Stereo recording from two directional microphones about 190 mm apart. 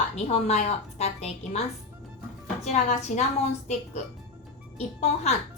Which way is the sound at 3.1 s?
40° left (ahead or behind).